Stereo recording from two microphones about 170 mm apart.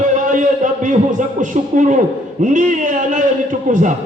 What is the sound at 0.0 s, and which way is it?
A man's voice, 50° right (ahead or behind).